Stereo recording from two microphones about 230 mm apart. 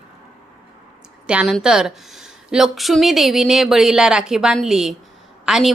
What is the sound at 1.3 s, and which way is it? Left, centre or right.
A woman's voice, centre.